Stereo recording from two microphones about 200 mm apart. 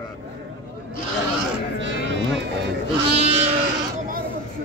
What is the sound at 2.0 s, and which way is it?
Sheep, 60° right (ahead or behind).